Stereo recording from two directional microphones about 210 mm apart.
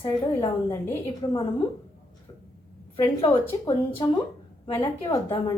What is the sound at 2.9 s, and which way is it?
Speech, 25° left (ahead or behind).